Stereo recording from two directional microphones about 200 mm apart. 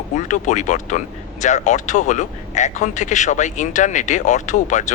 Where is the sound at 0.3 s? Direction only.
35° left (ahead or behind).